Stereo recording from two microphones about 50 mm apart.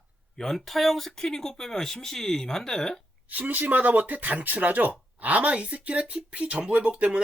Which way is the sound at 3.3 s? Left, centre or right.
Right.